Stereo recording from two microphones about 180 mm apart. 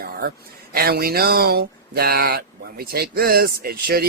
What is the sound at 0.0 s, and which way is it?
Speech, 60° right (ahead or behind).